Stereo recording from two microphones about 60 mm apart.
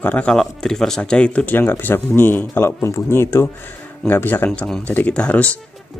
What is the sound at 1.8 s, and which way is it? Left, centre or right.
Speech, left.